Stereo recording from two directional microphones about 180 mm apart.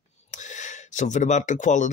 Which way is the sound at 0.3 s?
45° left (ahead or behind).